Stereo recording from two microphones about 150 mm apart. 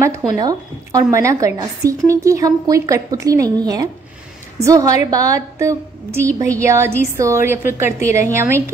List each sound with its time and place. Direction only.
0.3 s a woman's voice: 25° right (ahead or behind)